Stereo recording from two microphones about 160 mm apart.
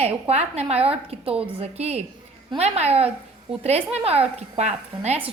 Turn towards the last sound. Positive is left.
turn(degrees=-45)  # may be behind; listen again after turning